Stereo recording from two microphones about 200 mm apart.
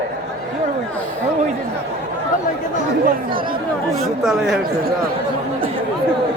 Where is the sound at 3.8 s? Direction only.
Centre (ahead or behind).